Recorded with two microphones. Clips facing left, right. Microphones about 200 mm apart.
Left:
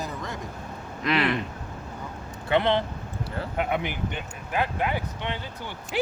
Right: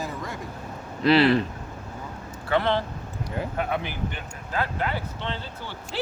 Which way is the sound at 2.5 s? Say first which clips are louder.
Left 1 dB; 20° left (ahead or behind).